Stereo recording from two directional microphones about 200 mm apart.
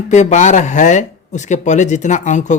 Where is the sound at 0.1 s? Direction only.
35° left (ahead or behind).